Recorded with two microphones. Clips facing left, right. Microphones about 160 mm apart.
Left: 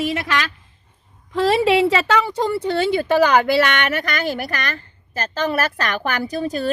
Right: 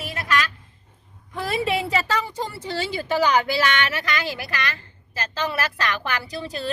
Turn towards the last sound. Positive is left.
turn(degrees=45)  # may be behind; listen again after turning